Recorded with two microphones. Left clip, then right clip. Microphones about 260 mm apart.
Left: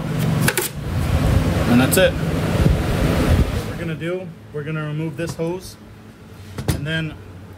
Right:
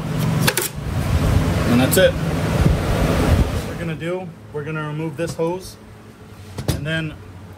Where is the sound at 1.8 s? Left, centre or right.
Centre.